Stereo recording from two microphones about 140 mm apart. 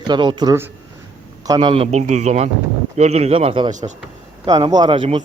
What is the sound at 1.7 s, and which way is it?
Speech, 50° right (ahead or behind).